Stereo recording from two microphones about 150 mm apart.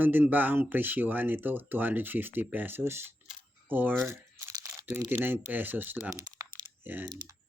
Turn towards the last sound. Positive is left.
turn(degrees=-25)  # may be behind; listen again after turning